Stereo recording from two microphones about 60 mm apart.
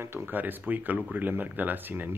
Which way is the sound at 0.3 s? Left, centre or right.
Right.